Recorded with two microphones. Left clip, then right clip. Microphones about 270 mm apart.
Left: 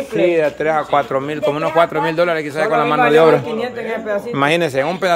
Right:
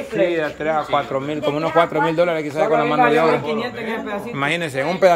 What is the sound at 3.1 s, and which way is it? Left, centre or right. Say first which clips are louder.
A man's voice: left 5 dB; left.